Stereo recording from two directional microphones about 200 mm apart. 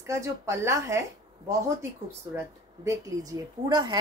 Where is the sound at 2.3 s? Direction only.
15° right (ahead or behind).